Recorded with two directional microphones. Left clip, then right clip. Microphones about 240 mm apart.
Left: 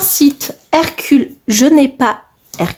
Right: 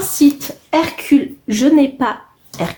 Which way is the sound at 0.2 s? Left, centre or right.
Left.